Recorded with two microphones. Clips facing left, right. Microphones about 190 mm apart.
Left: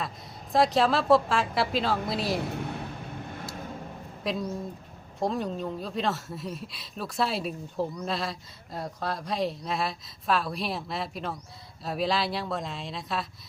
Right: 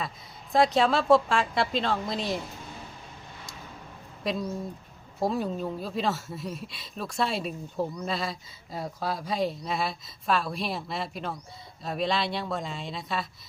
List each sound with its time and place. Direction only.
0.5 s speech: centre (ahead or behind)
2.4 s a sound: 65° left (ahead or behind)
4.2 s speech: centre (ahead or behind)